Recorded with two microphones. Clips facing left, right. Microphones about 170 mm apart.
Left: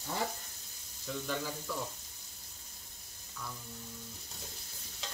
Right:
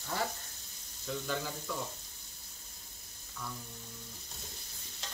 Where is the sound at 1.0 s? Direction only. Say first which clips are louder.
Right 1 dB; centre (ahead or behind).